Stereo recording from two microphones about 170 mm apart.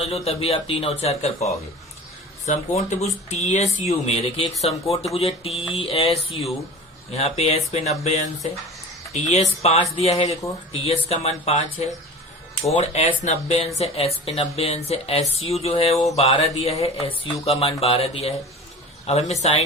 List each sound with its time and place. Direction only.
0.0 s speech: 40° left (ahead or behind)